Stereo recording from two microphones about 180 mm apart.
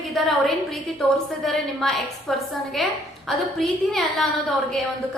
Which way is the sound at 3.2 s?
Centre (ahead or behind).